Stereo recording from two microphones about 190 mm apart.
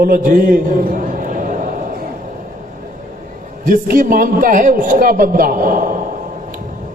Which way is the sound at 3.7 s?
45° right (ahead or behind).